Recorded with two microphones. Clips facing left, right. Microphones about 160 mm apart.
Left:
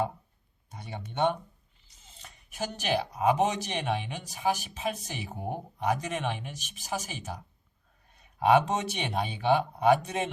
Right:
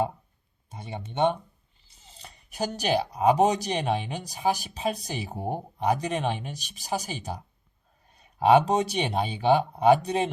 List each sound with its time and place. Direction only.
0.7 s speech: 25° right (ahead or behind)
2.0 s speech: 35° right (ahead or behind)